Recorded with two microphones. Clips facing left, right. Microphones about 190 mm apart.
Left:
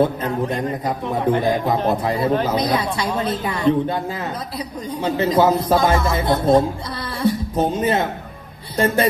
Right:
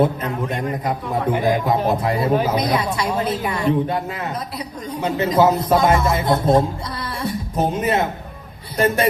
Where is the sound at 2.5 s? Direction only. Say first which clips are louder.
Even; 30° left (ahead or behind).